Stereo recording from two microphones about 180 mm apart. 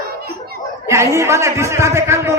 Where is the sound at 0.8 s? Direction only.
15° right (ahead or behind).